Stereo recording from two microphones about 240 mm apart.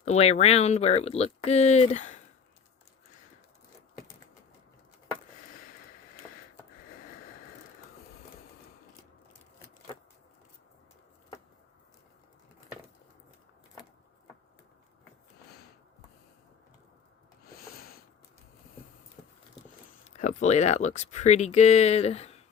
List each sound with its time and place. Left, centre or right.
0.0 s speech: left
17.4 s a sound: left
20.1 s speech: left